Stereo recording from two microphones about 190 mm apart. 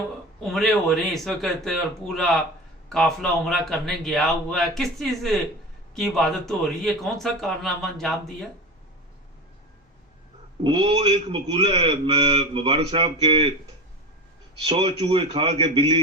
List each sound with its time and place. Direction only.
0.5 s a man's voice: centre (ahead or behind)
10.6 s a man's voice: 30° right (ahead or behind)
14.6 s a man's voice: 30° right (ahead or behind)